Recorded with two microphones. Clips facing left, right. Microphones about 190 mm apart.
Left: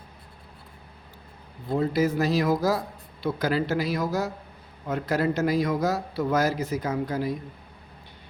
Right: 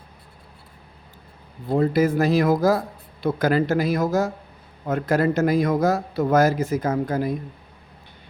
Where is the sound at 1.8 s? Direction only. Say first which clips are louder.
Right 4 dB; 55° right (ahead or behind).